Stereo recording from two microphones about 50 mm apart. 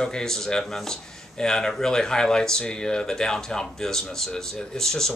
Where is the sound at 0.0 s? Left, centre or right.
Centre.